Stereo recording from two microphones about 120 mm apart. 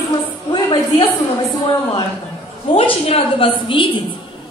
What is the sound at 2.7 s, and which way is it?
A woman's voice, 50° left (ahead or behind).